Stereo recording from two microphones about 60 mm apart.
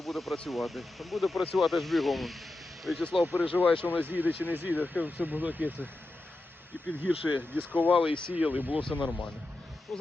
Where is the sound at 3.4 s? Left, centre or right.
Left.